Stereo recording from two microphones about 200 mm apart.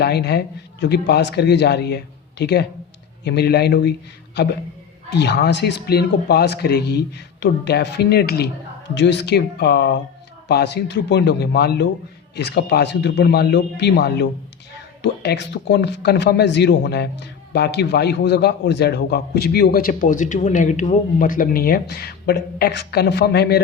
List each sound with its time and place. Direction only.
0.0 s speech: 55° left (ahead or behind)